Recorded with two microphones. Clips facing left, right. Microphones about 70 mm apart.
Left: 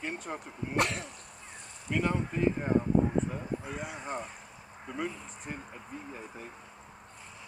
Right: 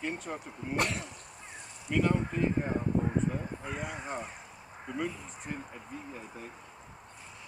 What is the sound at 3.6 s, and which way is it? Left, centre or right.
Speech, right.